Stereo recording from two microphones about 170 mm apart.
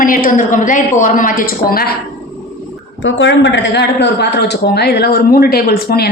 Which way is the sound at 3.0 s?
90° left.